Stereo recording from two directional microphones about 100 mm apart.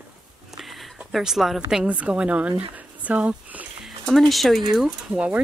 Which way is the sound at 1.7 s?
10° right (ahead or behind).